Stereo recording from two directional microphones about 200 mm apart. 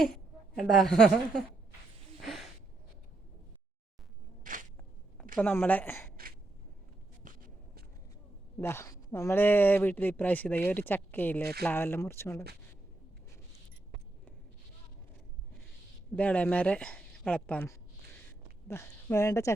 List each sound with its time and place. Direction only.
0.5 s a woman's voice: centre (ahead or behind)
2.2 s a sound: centre (ahead or behind)
4.5 s a sound: 45° right (ahead or behind)
5.4 s speech: 10° left (ahead or behind)
8.5 s speech: 10° left (ahead or behind)
16.1 s speech: 5° left (ahead or behind)